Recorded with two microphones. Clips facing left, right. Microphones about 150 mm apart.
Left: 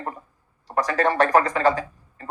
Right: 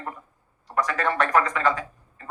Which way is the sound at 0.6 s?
35° left (ahead or behind).